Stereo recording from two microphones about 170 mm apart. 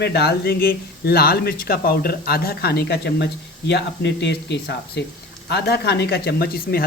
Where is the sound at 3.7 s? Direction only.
90° left.